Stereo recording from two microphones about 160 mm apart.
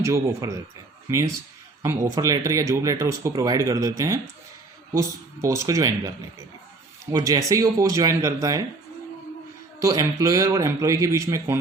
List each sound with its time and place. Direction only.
0.0 s speech: 20° right (ahead or behind)
1.8 s speech: 20° right (ahead or behind)
7.1 s speech: 20° right (ahead or behind)
9.8 s speech: 20° right (ahead or behind)